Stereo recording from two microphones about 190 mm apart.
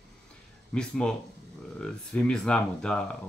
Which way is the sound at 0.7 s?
5° left (ahead or behind).